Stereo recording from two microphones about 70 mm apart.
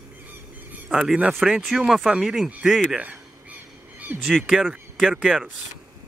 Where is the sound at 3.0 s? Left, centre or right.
Right.